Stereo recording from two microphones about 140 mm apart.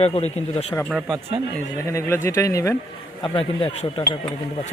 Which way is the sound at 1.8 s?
20° left (ahead or behind).